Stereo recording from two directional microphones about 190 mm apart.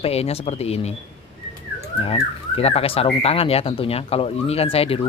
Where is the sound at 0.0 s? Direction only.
30° left (ahead or behind).